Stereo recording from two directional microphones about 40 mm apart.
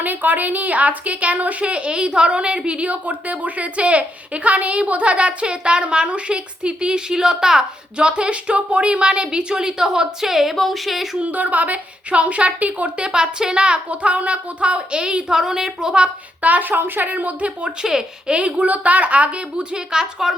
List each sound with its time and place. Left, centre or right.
0.0 s a woman's voice: right; by 7.6 s centre
7.9 s speech: right; by 11.2 s centre
11.2 s a woman's voice: right
12.1 s a woman's voice: right
13.0 s speech: right
15.3 s speech: centre
16.4 s speech: right
17.1 s a woman's voice: right
17.8 s speech: centre
18.3 s a woman's voice: right
19.7 s speech: centre